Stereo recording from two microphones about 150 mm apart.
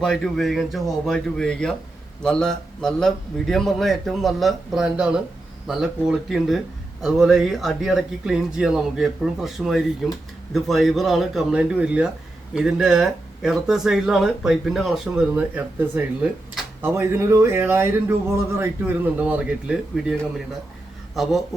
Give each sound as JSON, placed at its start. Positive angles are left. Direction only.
{"t": 0.0, "sound": "speech", "side_deg": 0}
{"t": 19.2, "sound": "speech", "side_deg": -10}